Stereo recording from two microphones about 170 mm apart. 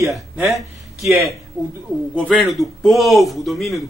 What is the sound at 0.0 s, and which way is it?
Speech, centre (ahead or behind).